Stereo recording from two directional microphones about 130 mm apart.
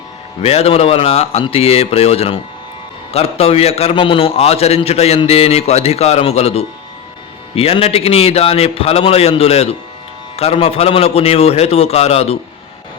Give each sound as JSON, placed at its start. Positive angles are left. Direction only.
{"t": 0.4, "sound": "a man's voice", "side_deg": 50}